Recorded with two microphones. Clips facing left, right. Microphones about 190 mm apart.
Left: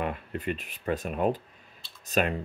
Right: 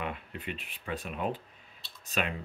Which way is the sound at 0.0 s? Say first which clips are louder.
Left 6 dB; 45° left (ahead or behind).